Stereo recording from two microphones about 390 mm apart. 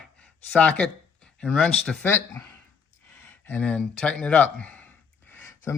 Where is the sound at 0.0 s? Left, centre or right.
Centre.